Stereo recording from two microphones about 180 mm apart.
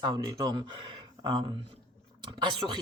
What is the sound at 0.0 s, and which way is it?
Speech, 20° right (ahead or behind).